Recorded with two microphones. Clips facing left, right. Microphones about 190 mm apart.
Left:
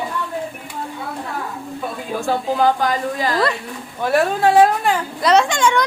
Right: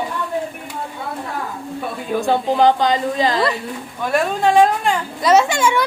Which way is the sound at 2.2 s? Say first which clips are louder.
Right 3 dB; 20° right (ahead or behind).